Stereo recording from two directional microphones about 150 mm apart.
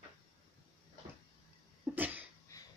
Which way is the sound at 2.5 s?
20° left (ahead or behind).